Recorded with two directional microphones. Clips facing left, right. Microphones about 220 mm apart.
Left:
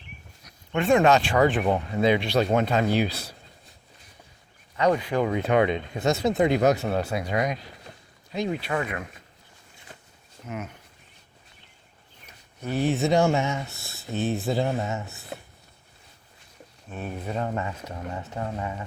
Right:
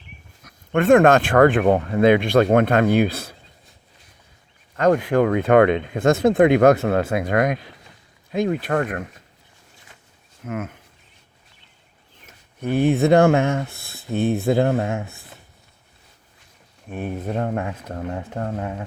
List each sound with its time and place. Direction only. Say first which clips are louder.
0.4 s speech: right 7 dB; 55° right (ahead or behind)
4.8 s speech: right 6 dB; 50° right (ahead or behind)
10.4 s speech: right 6 dB; 50° right (ahead or behind)
12.2 s speech: right 7 dB; 55° right (ahead or behind)
16.9 s speech: right 5 dB; 55° right (ahead or behind)